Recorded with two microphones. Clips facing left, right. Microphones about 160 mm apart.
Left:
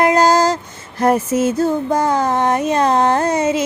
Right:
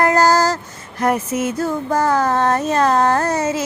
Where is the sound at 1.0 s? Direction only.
30° left (ahead or behind).